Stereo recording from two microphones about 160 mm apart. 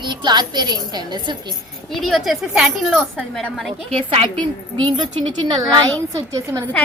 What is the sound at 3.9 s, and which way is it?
A woman's voice, 35° right (ahead or behind).